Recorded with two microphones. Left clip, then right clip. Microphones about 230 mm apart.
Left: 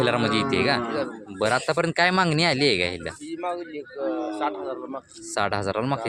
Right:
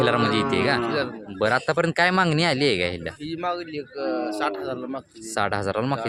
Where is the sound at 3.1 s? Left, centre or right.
Right.